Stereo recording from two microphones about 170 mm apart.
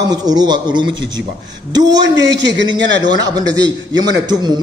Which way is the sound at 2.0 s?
90° right.